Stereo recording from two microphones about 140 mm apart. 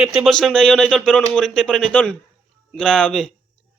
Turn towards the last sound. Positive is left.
turn(degrees=5)  # may be behind; listen again after turning